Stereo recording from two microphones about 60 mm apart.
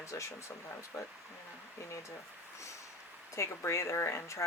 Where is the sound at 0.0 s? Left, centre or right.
Left.